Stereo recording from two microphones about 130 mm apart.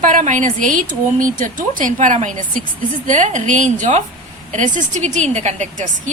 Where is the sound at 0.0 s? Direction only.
85° right.